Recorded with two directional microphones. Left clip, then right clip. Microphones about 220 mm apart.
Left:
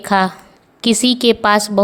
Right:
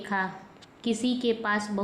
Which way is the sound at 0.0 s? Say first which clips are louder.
Left 14 dB; 45° left (ahead or behind).